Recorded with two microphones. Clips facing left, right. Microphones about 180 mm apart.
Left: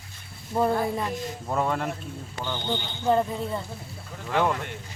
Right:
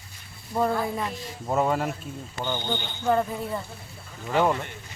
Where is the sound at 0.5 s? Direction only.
20° left (ahead or behind).